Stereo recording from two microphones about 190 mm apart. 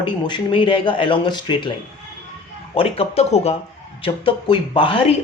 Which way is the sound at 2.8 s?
30° left (ahead or behind).